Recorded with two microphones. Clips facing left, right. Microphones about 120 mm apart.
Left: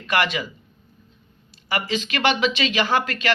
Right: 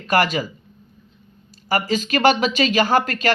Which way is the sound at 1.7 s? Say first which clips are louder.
Right 5 dB; 40° right (ahead or behind).